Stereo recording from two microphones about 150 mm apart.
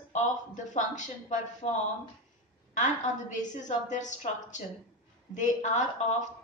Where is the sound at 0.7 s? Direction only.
55° left (ahead or behind).